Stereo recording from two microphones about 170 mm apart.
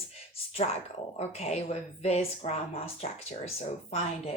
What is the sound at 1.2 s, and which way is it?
Speech, 40° left (ahead or behind).